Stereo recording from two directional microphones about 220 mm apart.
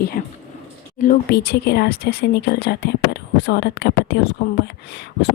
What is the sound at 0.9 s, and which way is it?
Speech, 40° left (ahead or behind).